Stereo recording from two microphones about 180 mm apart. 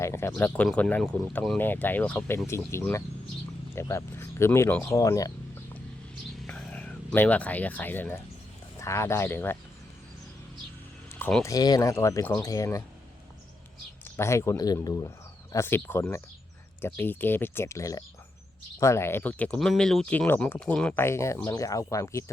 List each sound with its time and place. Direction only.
0.0 s speech: 15° left (ahead or behind)
6.5 s speech: 5° left (ahead or behind)
11.1 s music: 5° left (ahead or behind)
11.4 s speech: 20° left (ahead or behind)
14.0 s speech: 15° left (ahead or behind)